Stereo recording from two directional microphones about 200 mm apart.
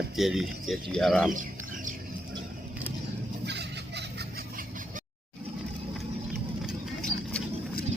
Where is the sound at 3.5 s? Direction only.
55° right (ahead or behind).